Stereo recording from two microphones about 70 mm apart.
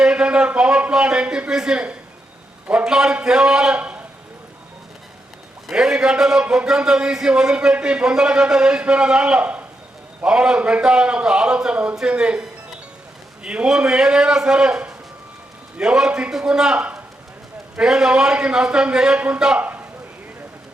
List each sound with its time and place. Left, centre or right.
0.0 s a man's voice: centre
3.8 s speech: right
5.6 s a man's voice: centre
19.5 s a sound: right